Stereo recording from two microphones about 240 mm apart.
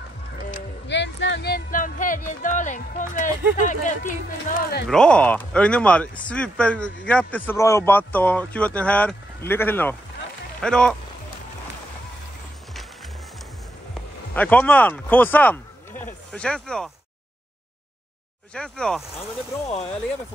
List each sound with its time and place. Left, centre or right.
0.8 s music: left
3.5 s speech: left
4.8 s speech: centre
14.3 s speech: centre
18.5 s speech: centre